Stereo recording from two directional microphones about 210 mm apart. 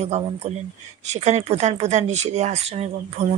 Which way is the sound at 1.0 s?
30° right (ahead or behind).